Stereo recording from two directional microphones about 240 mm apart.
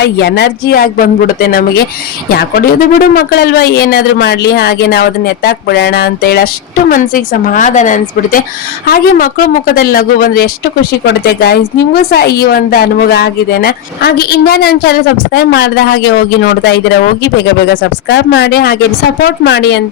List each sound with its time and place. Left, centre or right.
0.0 s speech: left
18.1 s speech: left